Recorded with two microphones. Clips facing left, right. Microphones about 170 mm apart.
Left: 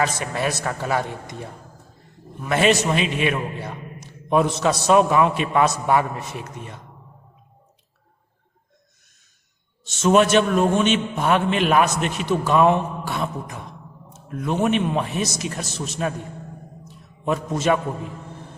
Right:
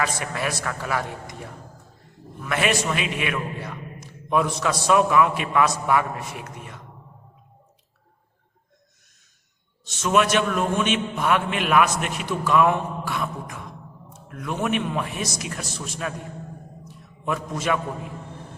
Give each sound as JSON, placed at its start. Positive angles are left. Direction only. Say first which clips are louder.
{"t": 0.0, "sound": "a man's voice", "louder": "left 3 dB", "side_deg": 25}
{"t": 2.4, "sound": "a man's voice", "louder": "left 5 dB", "side_deg": 25}
{"t": 9.8, "sound": "a man's voice", "louder": "left 4 dB", "side_deg": 30}
{"t": 17.2, "sound": "a man's voice", "louder": "left 5 dB", "side_deg": 25}